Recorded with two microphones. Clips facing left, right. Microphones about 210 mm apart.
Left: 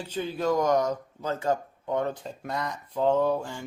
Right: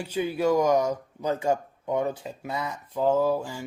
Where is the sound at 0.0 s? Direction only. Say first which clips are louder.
Right 3 dB; 10° right (ahead or behind).